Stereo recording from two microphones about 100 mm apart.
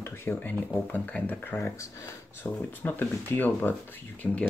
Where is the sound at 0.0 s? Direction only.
20° left (ahead or behind).